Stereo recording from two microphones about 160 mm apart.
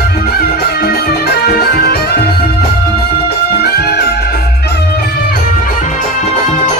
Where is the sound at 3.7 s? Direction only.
80° left.